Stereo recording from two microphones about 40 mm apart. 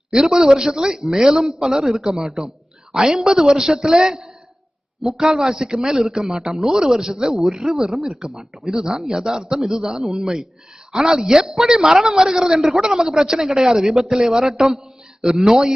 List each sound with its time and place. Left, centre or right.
0.1 s a man's voice: centre